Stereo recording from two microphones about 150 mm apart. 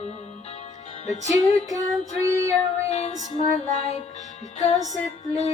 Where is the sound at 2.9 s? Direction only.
45° left (ahead or behind).